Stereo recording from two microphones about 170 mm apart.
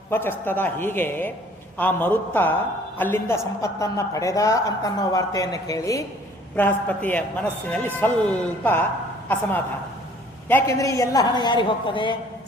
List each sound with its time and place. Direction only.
0.1 s a man's voice: 10° left (ahead or behind); by 12.1 s 30° left (ahead or behind)